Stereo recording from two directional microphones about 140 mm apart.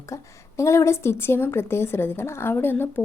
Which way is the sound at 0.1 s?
20° left (ahead or behind).